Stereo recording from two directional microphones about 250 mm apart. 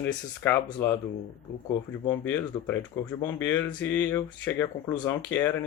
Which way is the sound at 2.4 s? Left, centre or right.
Centre.